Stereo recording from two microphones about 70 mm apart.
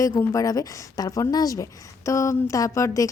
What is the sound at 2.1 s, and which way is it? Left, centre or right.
A woman's voice, left.